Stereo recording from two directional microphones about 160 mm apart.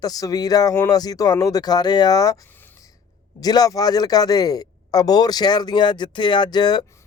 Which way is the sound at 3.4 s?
25° left (ahead or behind).